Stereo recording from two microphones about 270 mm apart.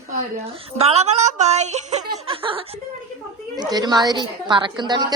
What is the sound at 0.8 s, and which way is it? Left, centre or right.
A woman's voice, right.